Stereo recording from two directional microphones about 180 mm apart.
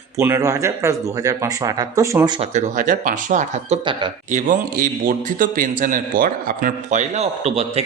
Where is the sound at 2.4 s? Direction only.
40° right (ahead or behind).